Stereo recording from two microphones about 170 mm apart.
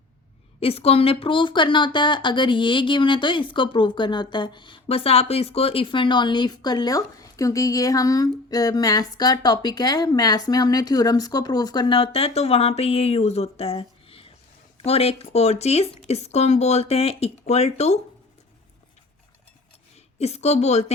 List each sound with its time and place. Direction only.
0.6 s speech: 35° left (ahead or behind)
20.1 s speech: 40° left (ahead or behind)